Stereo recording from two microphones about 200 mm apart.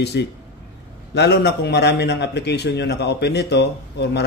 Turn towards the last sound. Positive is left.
turn(degrees=55)  # may be behind; listen again after turning